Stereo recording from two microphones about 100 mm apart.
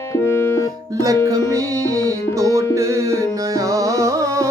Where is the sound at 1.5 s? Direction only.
35° right (ahead or behind).